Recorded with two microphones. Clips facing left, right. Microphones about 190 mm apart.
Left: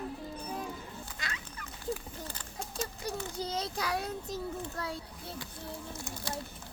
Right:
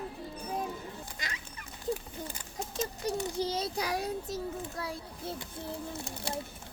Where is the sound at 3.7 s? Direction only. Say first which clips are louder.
Right 1 dB; 15° right (ahead or behind).